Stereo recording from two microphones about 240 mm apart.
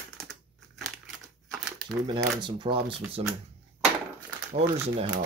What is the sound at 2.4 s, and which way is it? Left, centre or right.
Speech, right.